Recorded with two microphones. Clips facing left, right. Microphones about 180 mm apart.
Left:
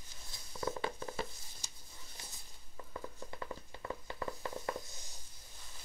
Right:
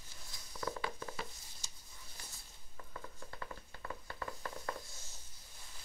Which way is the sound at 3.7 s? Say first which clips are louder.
Left 4 dB; 20° left (ahead or behind).